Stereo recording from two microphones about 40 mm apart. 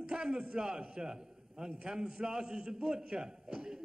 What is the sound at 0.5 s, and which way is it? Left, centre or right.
A man's voice, centre.